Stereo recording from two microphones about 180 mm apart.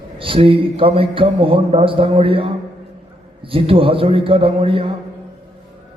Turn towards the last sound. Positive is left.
turn(degrees=-30)  # may be behind; listen again after turning